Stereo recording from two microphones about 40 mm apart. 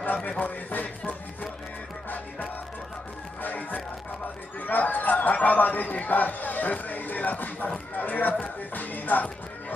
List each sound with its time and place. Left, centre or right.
0.0 s speech: left
3.4 s music: left
4.6 s a man's voice: left